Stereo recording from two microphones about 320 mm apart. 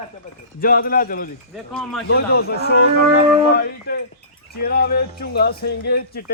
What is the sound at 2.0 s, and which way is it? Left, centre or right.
Speech, left.